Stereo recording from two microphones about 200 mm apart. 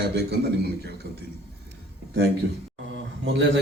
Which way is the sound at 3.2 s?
65° right (ahead or behind).